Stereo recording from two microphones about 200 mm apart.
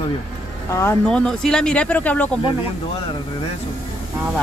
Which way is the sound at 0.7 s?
15° left (ahead or behind).